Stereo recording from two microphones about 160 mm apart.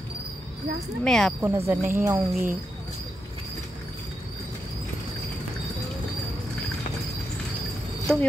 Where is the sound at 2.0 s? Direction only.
15° right (ahead or behind).